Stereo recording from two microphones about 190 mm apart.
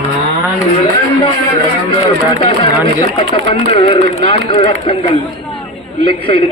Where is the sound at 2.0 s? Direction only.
30° left (ahead or behind).